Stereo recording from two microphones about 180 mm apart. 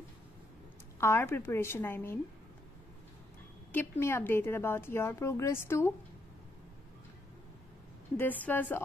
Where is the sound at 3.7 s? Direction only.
15° left (ahead or behind).